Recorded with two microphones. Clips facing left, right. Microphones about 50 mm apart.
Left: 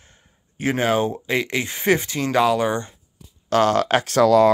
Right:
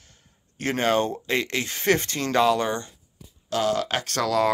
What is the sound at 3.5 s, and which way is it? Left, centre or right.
Speech, left.